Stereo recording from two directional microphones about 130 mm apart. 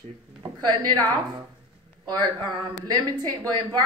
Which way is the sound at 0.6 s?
35° right (ahead or behind).